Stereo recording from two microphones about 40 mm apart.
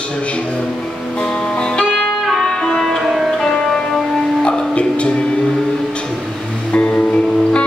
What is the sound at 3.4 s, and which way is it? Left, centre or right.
Music, centre.